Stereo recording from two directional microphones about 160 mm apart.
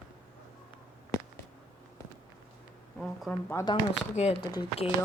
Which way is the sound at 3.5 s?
25° left (ahead or behind).